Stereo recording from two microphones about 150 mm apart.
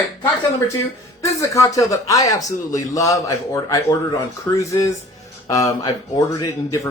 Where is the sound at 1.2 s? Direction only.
20° left (ahead or behind).